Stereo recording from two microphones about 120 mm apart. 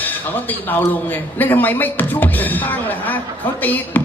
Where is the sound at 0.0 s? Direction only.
15° left (ahead or behind).